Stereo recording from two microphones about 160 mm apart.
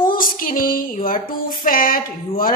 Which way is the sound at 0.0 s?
60° left (ahead or behind).